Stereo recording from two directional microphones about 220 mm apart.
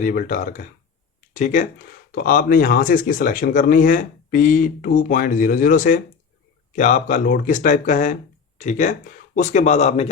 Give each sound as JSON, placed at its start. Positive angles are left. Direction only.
{"t": 0.0, "sound": "speech", "side_deg": 40}